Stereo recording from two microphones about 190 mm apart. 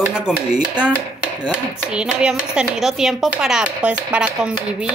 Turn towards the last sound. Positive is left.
turn(degrees=-5)  # may be behind; listen again after turning